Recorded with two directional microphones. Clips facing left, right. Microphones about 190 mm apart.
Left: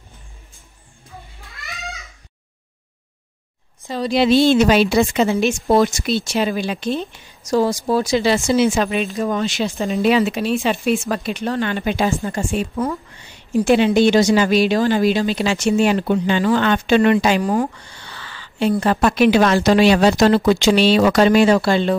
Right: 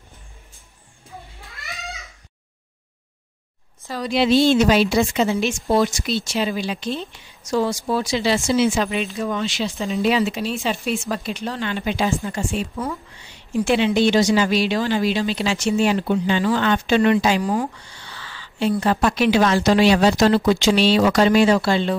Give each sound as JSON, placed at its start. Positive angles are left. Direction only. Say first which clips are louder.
{"t": 4.0, "sound": "a woman's voice", "louder": "left 3 dB", "side_deg": 40}
{"t": 4.3, "sound": "speech", "louder": "left 2 dB", "side_deg": 60}